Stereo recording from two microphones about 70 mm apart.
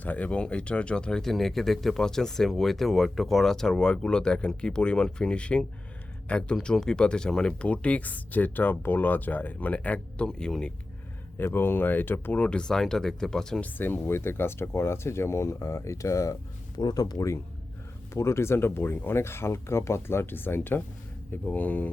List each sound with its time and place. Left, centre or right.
0.0 s speech: left
10.2 s speech: centre
11.3 s speech: left; by 13.6 s centre
13.6 s speech: left
16.7 s speech: left
18.1 s speech: left